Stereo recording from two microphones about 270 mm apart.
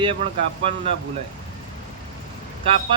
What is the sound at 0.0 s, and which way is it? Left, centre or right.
Speech, right.